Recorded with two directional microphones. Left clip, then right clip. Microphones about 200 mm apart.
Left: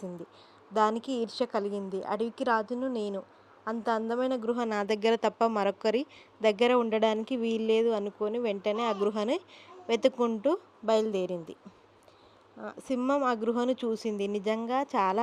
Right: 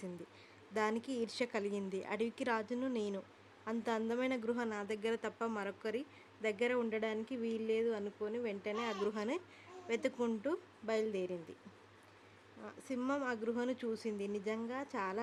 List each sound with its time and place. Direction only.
0.7 s a woman's voice: 15° left (ahead or behind)
12.6 s a woman's voice: 30° left (ahead or behind)